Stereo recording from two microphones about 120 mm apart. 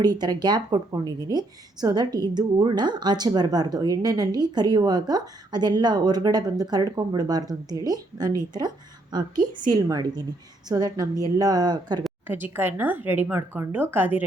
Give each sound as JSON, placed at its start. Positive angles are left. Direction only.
{"t": 0.0, "sound": "speech", "side_deg": -35}
{"t": 12.3, "sound": "a woman's voice", "side_deg": -15}